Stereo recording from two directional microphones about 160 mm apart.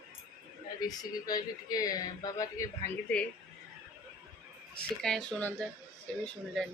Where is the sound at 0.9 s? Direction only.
25° left (ahead or behind).